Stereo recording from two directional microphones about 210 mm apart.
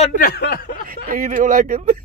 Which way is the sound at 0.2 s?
50° left (ahead or behind).